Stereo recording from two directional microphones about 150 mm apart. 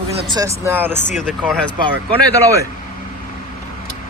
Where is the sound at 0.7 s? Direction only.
15° right (ahead or behind).